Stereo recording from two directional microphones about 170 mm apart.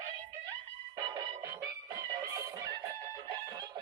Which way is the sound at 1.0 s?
20° right (ahead or behind).